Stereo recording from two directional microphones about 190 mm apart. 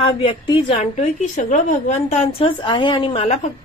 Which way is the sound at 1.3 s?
40° left (ahead or behind).